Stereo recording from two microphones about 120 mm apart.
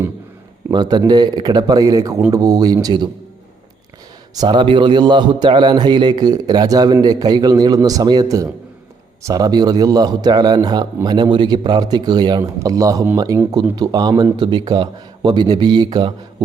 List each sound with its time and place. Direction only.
0.7 s a man's voice: 35° right (ahead or behind)
4.4 s a man's voice: 40° right (ahead or behind)